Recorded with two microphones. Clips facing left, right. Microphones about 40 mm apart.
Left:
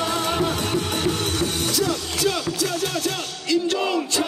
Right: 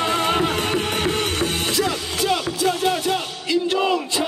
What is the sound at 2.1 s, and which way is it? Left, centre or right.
Music, right.